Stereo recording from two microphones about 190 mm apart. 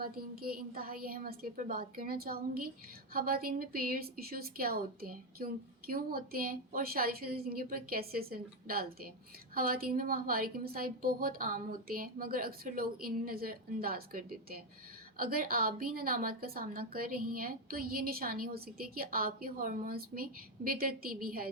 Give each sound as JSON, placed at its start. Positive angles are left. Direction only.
{"t": 0.0, "sound": "a woman's voice", "side_deg": -50}